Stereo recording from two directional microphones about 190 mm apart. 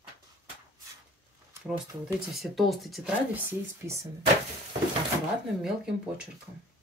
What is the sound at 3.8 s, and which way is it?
Speech, 15° right (ahead or behind).